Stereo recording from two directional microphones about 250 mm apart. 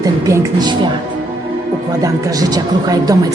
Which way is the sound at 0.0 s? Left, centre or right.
Centre.